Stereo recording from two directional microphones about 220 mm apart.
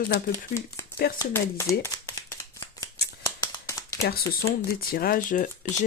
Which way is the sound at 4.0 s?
45° left (ahead or behind).